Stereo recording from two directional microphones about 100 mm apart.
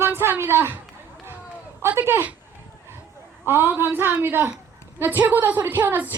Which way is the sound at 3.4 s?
20° right (ahead or behind).